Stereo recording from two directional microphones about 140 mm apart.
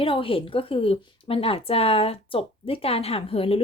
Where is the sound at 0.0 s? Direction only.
40° left (ahead or behind).